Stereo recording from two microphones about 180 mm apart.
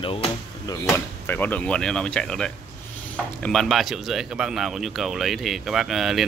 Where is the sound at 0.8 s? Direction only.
15° left (ahead or behind).